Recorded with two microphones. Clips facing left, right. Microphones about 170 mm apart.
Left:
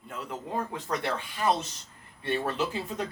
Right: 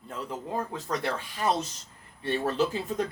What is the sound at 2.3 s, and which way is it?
Speech, 35° right (ahead or behind).